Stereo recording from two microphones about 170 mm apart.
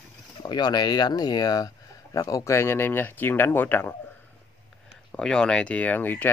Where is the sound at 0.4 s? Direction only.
25° left (ahead or behind).